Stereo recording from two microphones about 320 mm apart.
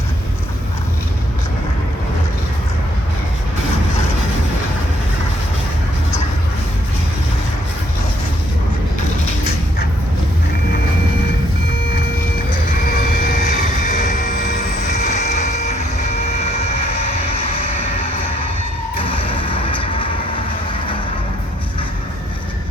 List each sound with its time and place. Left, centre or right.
13.0 s vehicle: left
19.0 s music: centre